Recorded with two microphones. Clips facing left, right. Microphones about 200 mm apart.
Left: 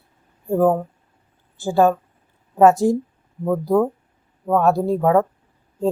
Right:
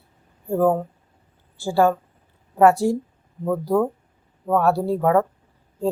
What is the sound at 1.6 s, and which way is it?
A woman's voice, 20° left (ahead or behind).